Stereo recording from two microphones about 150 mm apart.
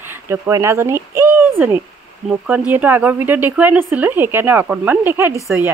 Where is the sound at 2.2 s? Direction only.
10° right (ahead or behind).